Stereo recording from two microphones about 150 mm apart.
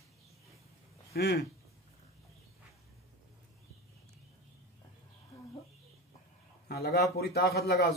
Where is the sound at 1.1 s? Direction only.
90° left.